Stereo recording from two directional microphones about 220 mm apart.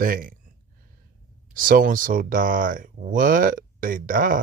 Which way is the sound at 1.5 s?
40° right (ahead or behind).